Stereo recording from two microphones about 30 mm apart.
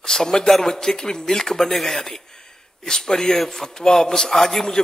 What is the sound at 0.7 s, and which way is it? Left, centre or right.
A man's voice, left.